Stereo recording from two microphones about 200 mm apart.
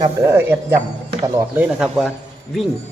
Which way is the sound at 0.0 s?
15° right (ahead or behind).